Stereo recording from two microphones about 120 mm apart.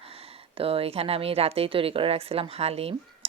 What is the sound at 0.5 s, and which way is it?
A woman's voice, 55° right (ahead or behind).